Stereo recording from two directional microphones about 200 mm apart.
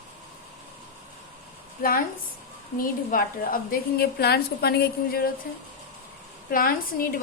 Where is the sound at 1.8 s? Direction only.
45° left (ahead or behind).